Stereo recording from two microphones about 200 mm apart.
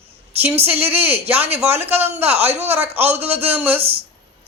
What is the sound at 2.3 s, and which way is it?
Speech, 30° right (ahead or behind).